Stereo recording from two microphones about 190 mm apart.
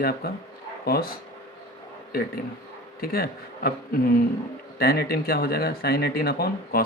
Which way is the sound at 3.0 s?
55° left (ahead or behind).